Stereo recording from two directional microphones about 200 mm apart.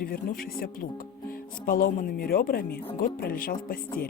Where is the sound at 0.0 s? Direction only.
45° left (ahead or behind).